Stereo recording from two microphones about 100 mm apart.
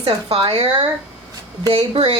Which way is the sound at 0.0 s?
65° right (ahead or behind).